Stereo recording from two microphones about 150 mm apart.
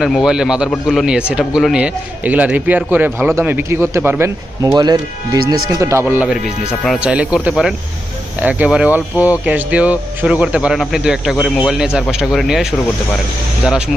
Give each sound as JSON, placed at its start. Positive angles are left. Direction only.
{"t": 0.0, "sound": "a man's voice", "side_deg": 0}
{"t": 6.8, "sound": "a man's voice", "side_deg": -5}